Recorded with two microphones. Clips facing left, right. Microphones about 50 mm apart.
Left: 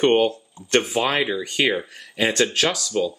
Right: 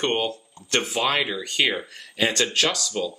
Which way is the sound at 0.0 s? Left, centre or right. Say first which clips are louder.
Left 7 dB; centre.